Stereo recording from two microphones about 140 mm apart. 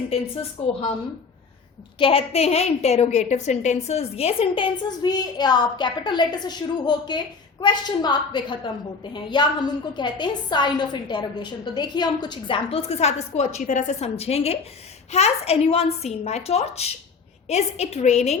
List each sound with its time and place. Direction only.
2.0 s a woman's voice: 40° left (ahead or behind)